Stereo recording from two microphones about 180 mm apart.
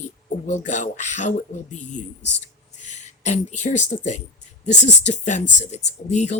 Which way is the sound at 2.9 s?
40° left (ahead or behind).